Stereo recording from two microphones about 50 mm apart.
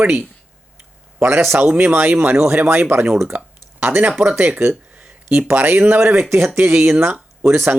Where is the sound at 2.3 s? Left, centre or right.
Right.